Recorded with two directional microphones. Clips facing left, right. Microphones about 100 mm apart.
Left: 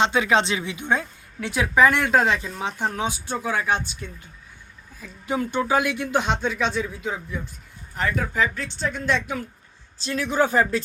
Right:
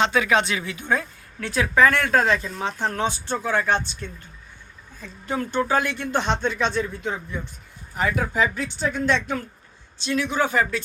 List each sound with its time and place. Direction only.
0.0 s a woman's voice: 25° left (ahead or behind); by 7.4 s 5° left (ahead or behind)
7.9 s speech: 10° right (ahead or behind); by 9.4 s 5° left (ahead or behind)
10.0 s speech: 35° left (ahead or behind)